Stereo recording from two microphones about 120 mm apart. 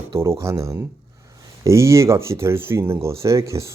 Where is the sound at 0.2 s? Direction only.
25° right (ahead or behind).